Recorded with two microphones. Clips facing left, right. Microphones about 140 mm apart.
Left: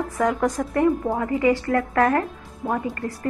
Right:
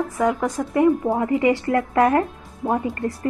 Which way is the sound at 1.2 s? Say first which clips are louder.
Right 1 dB; 20° right (ahead or behind).